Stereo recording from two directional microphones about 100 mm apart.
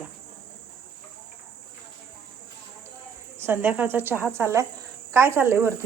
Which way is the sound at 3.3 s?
20° right (ahead or behind).